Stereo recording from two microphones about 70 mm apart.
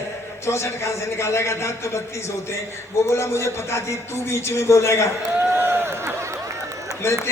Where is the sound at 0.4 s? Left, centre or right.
Left.